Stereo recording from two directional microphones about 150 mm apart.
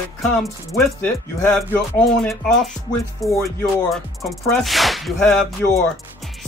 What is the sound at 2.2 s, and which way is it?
Speech, 5° left (ahead or behind).